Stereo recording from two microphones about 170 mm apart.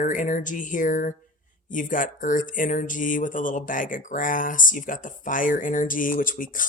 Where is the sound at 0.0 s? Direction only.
50° left (ahead or behind).